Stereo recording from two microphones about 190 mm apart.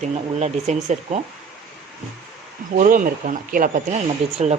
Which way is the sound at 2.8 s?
45° right (ahead or behind).